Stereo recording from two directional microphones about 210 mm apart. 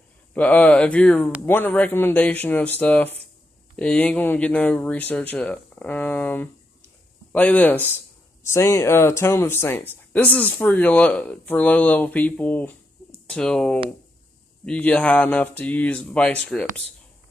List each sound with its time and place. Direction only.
0.3 s speech: 5° left (ahead or behind)